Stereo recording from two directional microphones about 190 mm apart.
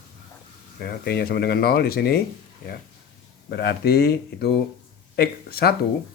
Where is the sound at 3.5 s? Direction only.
60° left (ahead or behind).